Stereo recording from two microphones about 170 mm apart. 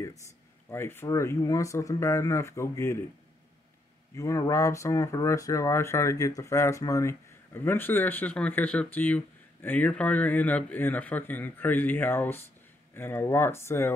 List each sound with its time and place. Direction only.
0.7 s speech: 15° left (ahead or behind)
4.2 s speech: 20° left (ahead or behind)